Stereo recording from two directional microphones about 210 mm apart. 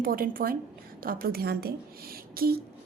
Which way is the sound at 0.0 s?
45° right (ahead or behind).